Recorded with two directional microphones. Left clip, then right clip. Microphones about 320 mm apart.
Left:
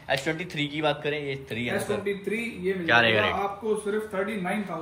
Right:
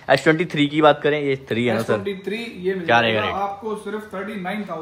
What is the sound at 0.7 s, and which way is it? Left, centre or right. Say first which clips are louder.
A man's voice: right 12 dB; centre.